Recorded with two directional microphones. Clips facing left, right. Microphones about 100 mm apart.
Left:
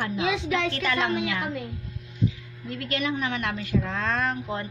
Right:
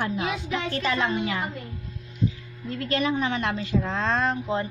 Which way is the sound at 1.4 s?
90° left.